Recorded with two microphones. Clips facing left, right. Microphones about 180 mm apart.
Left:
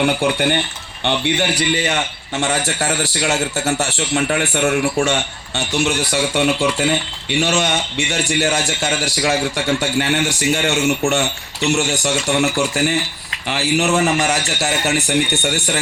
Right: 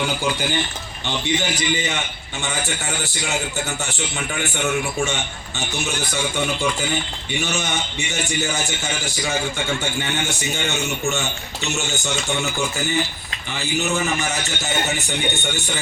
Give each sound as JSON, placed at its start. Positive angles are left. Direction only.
{"t": 0.0, "sound": "a man's voice", "side_deg": 60}
{"t": 11.7, "sound": "a man's voice", "side_deg": 75}